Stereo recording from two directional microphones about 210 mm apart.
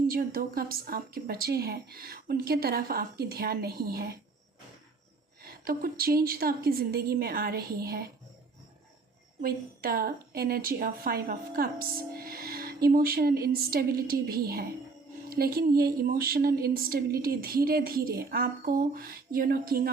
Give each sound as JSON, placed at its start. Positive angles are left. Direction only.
{"t": 0.1, "sound": "a woman's voice", "side_deg": -45}
{"t": 5.4, "sound": "a woman's voice", "side_deg": -45}
{"t": 9.4, "sound": "a woman's voice", "side_deg": -45}